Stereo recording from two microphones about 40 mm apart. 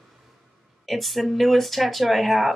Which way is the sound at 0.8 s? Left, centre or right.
Centre.